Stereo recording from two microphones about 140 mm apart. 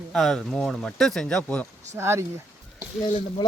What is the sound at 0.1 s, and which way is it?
Speech, centre (ahead or behind).